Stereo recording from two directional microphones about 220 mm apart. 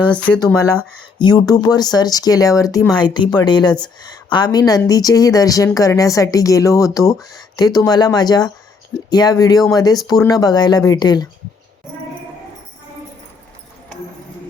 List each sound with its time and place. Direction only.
0.1 s speech: 5° left (ahead or behind)
1.2 s speech: 20° left (ahead or behind)